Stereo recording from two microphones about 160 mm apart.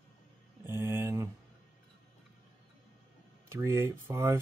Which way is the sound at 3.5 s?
15° right (ahead or behind).